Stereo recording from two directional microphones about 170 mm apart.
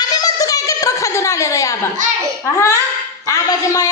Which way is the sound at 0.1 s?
20° left (ahead or behind).